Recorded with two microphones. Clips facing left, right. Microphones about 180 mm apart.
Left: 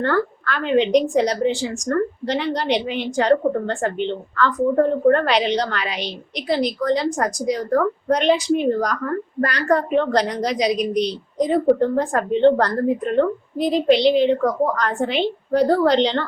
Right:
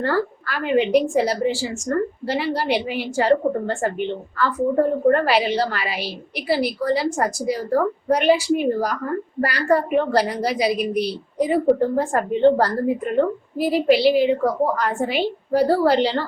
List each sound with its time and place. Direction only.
0.0 s a woman's voice: 5° right (ahead or behind)